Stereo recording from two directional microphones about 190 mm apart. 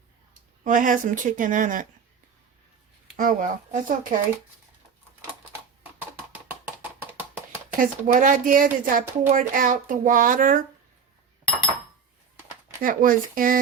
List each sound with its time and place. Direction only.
0.6 s speech: 45° right (ahead or behind)
3.2 s speech: 45° right (ahead or behind)
7.8 s speech: 45° right (ahead or behind)
12.8 s speech: 45° right (ahead or behind)